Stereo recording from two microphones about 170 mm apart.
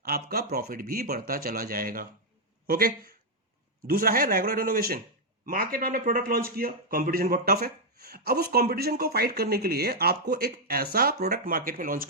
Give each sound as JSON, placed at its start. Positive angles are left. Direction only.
{"t": 0.0, "sound": "a man's voice", "side_deg": -60}